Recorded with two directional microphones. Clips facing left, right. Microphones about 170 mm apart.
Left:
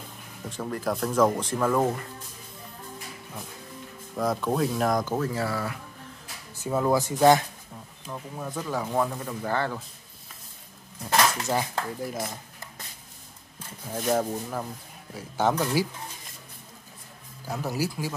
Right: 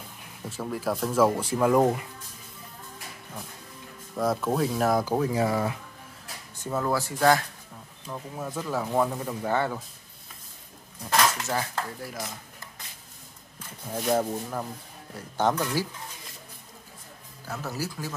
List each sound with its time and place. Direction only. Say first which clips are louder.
0.5 s speech: even; 5° right (ahead or behind)
4.1 s speech: even; centre (ahead or behind)
5.1 s speech: right 3 dB; 15° right (ahead or behind)
6.5 s speech: left 3 dB; 10° left (ahead or behind)
8.1 s speech: even; centre (ahead or behind)
11.4 s speech: left 2 dB; 15° left (ahead or behind)
13.9 s speech: even; centre (ahead or behind)
17.5 s speech: left 4 dB; 15° left (ahead or behind)